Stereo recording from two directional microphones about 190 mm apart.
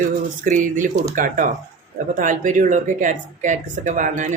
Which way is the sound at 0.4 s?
45° right (ahead or behind).